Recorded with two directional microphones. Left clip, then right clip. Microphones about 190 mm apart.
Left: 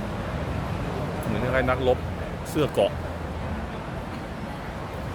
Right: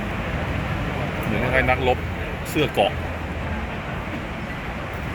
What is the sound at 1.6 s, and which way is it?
Speech, 15° left (ahead or behind).